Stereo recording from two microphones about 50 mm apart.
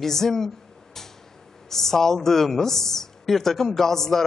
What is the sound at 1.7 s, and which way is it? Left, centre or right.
A woman's voice, centre.